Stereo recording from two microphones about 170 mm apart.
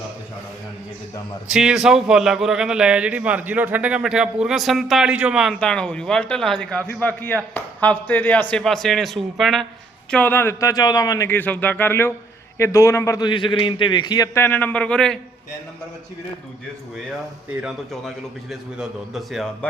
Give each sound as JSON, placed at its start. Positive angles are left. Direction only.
{"t": 1.5, "sound": "a man's voice", "side_deg": -5}
{"t": 17.6, "sound": "speech", "side_deg": 0}